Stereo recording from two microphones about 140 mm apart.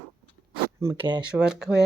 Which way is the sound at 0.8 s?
20° right (ahead or behind).